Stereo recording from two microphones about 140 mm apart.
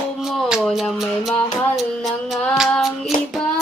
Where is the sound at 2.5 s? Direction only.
Centre (ahead or behind).